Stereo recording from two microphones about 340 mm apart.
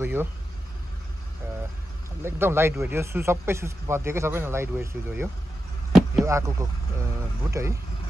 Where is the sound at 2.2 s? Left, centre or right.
Centre.